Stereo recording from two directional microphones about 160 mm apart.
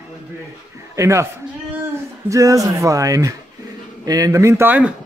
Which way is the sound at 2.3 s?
20° right (ahead or behind).